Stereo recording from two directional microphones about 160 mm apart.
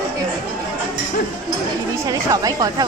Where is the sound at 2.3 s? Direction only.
20° right (ahead or behind).